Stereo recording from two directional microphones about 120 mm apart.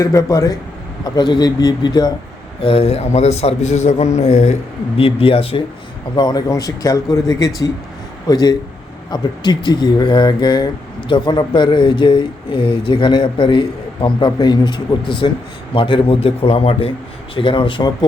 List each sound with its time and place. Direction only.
0.0 s speech: 25° left (ahead or behind)
1.1 s speech: 40° left (ahead or behind)
2.6 s a man's voice: 50° left (ahead or behind); by 4.5 s 70° left (ahead or behind)
4.9 s a man's voice: 50° left (ahead or behind)
6.1 s a man's voice: 35° left (ahead or behind)